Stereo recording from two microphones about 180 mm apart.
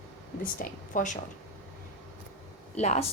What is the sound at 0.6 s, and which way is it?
Speech, 45° left (ahead or behind).